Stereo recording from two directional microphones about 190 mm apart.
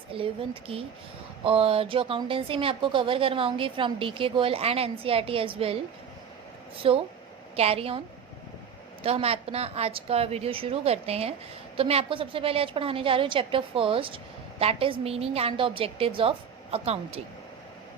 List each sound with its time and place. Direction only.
0.1 s a woman's voice: 30° right (ahead or behind)
9.0 s a woman's voice: 30° right (ahead or behind)